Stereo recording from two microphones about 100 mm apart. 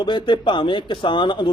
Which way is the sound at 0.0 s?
50° left (ahead or behind).